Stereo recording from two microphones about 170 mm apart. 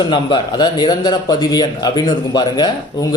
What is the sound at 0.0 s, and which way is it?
Speech, 30° left (ahead or behind).